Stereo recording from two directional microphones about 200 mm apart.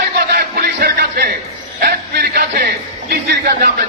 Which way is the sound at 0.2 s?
50° right (ahead or behind).